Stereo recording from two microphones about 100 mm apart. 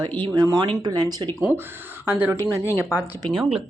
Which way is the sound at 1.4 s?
20° right (ahead or behind).